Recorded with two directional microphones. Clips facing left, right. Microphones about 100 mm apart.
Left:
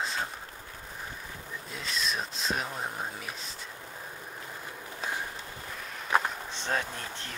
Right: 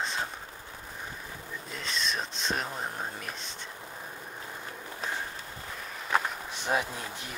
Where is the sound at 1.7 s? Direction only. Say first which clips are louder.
Even; centre (ahead or behind).